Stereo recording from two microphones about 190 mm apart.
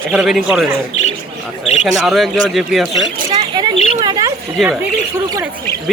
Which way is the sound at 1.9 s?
Centre (ahead or behind).